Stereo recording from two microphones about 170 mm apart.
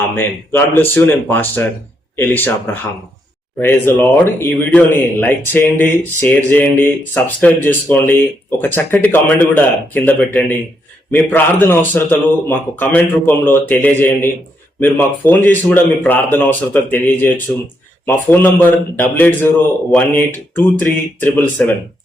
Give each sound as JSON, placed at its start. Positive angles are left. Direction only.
{"t": 0.2, "sound": "speech", "side_deg": 10}
{"t": 3.6, "sound": "speech", "side_deg": 15}